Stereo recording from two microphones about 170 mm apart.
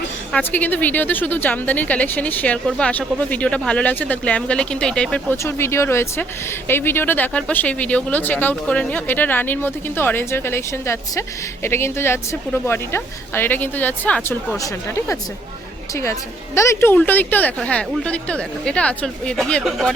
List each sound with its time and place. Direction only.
0.3 s speech: 10° left (ahead or behind)
16.6 s speech: 15° left (ahead or behind)